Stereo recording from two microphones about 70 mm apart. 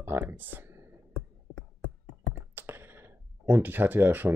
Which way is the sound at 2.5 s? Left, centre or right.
Right.